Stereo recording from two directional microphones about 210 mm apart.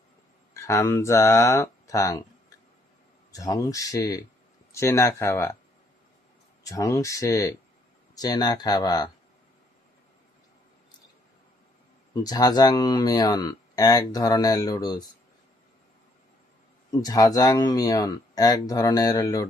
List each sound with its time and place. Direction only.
0.5 s speech: 15° left (ahead or behind)
3.3 s speech: 15° left (ahead or behind)
6.7 s speech: 15° left (ahead or behind)
12.1 s speech: 20° left (ahead or behind)
16.9 s speech: 20° left (ahead or behind)